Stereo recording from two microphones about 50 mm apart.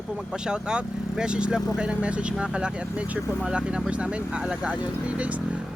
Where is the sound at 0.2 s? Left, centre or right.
Centre.